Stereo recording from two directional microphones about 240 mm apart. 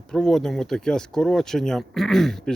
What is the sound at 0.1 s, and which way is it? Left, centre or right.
Speech, centre.